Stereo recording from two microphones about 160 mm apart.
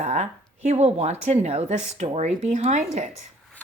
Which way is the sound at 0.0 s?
45° right (ahead or behind).